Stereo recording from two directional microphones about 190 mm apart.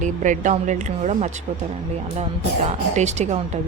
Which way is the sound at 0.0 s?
40° right (ahead or behind).